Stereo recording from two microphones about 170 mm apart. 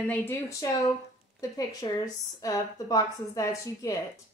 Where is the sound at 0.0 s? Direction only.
10° left (ahead or behind).